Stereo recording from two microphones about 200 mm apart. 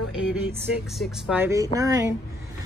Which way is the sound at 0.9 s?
Centre (ahead or behind).